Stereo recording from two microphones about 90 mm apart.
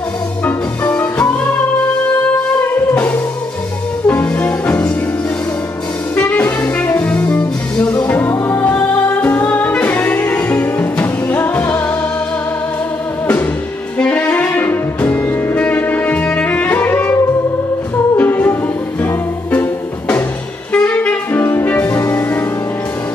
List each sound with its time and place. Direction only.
0.5 s music: 15° left (ahead or behind)
2.6 s music: 20° left (ahead or behind)
6.1 s music: 20° left (ahead or behind)
13.9 s saxophone: 15° left (ahead or behind)
18.1 s music: 20° left (ahead or behind)
20.7 s saxophone: 15° left (ahead or behind)